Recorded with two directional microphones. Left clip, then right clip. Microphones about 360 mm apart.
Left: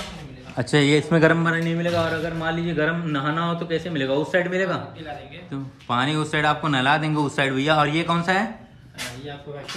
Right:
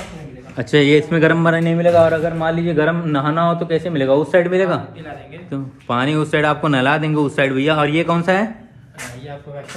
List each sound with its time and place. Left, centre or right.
0.6 s a man's voice: centre